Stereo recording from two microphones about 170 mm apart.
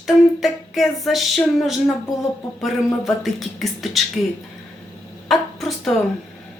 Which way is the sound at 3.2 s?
Centre (ahead or behind).